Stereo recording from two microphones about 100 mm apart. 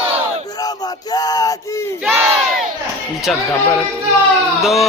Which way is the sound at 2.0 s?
20° right (ahead or behind).